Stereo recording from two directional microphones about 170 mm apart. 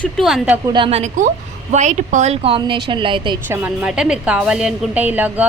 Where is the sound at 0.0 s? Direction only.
Centre (ahead or behind).